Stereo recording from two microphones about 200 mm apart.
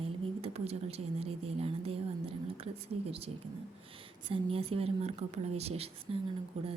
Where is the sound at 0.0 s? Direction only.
30° right (ahead or behind).